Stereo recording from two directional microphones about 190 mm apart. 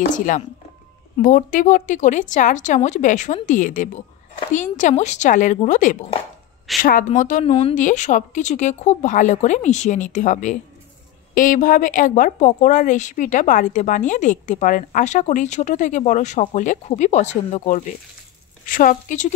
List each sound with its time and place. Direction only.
1.2 s a woman's voice: 45° left (ahead or behind)